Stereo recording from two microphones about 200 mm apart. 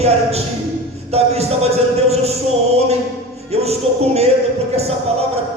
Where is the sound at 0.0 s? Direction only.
30° right (ahead or behind).